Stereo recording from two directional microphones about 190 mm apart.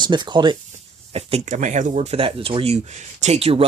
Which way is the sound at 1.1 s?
35° right (ahead or behind).